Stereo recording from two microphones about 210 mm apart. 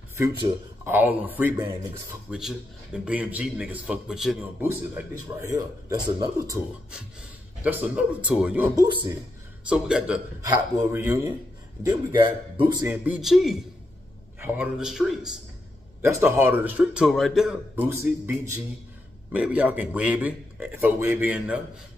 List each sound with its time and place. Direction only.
0.2 s a man's voice: 15° right (ahead or behind)
7.6 s a man's voice: 5° right (ahead or behind)
8.7 s a man's voice: 20° right (ahead or behind)
9.7 s a man's voice: 5° right (ahead or behind)
10.4 s a man's voice: 15° right (ahead or behind)
12.8 s a man's voice: 10° right (ahead or behind)